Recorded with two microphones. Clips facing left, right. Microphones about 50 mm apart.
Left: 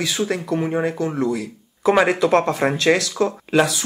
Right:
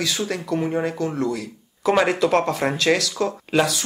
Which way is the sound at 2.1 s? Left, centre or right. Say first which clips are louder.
Left 2 dB; left.